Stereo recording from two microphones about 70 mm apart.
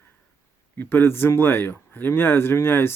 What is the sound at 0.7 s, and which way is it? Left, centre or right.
Speech, left.